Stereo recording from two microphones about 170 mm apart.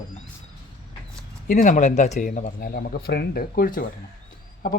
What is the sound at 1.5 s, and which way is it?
Speech, 50° left (ahead or behind).